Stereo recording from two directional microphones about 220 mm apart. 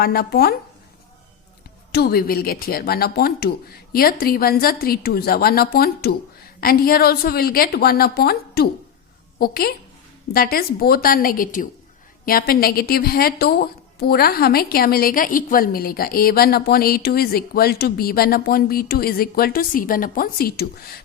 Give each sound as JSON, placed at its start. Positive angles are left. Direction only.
{"t": 0.0, "sound": "a woman's voice", "side_deg": 45}
{"t": 1.9, "sound": "a woman's voice", "side_deg": 45}